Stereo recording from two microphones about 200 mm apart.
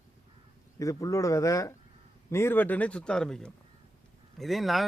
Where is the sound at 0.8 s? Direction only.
15° left (ahead or behind).